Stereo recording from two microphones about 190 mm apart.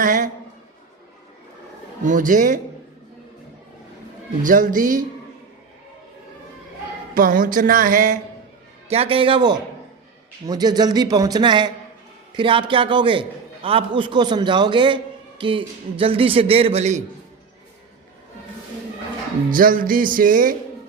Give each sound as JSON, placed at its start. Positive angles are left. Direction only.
{"t": 0.0, "sound": "a woman's voice", "side_deg": -45}
{"t": 2.0, "sound": "speech", "side_deg": -45}
{"t": 4.4, "sound": "speech", "side_deg": -45}
{"t": 7.1, "sound": "speech", "side_deg": -45}
{"t": 8.9, "sound": "a man's voice", "side_deg": -30}
{"t": 19.5, "sound": "speech", "side_deg": -45}